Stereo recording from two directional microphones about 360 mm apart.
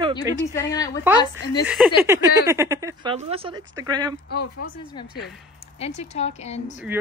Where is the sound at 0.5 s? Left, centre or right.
Centre.